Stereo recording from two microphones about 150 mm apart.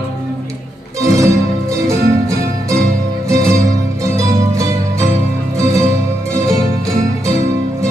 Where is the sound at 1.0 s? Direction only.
20° right (ahead or behind).